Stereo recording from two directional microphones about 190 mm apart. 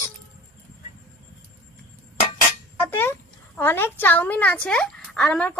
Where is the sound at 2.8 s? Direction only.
10° left (ahead or behind).